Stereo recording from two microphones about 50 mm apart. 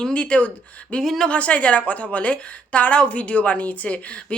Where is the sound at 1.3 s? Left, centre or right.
Left.